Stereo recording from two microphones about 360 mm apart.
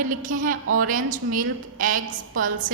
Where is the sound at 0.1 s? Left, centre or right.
Right.